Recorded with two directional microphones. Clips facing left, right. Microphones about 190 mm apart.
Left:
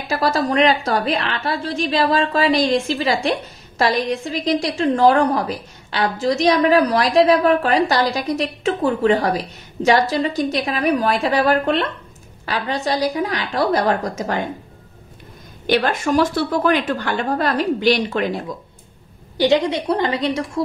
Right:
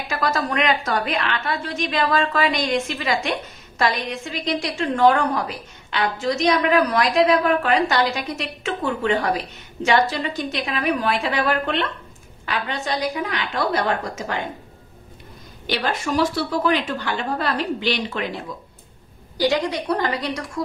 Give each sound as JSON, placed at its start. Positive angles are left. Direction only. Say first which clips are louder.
{"t": 0.1, "sound": "a woman's voice", "louder": "left 5 dB", "side_deg": 30}
{"t": 15.6, "sound": "a woman's voice", "louder": "left 6 dB", "side_deg": 50}
{"t": 19.3, "sound": "a woman's voice", "louder": "left 4 dB", "side_deg": 20}